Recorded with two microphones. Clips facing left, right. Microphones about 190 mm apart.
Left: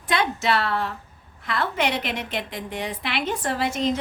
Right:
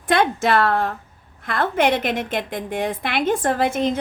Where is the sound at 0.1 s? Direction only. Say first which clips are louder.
Right 5 dB; 50° right (ahead or behind).